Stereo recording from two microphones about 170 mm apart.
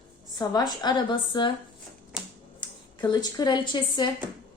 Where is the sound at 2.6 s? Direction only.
25° left (ahead or behind).